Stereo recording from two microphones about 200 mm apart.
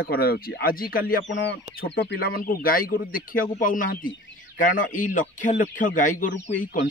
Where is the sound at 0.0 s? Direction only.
50° left (ahead or behind).